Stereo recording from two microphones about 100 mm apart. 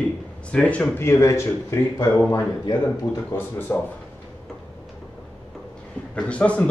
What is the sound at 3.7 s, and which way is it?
Speech, 20° left (ahead or behind).